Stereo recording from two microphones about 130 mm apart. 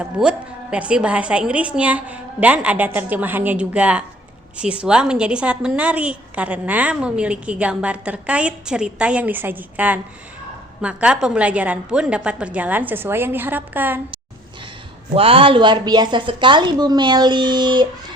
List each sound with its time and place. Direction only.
0.0 s a woman's voice: 10° right (ahead or behind)
15.1 s a woman's voice: 45° right (ahead or behind)